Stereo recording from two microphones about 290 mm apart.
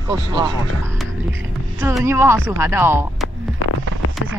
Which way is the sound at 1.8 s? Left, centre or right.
Centre.